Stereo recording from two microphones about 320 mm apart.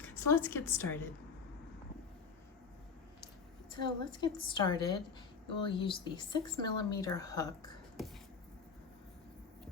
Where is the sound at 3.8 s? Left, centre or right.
Centre.